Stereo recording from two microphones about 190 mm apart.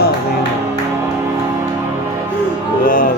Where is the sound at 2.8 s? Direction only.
45° left (ahead or behind).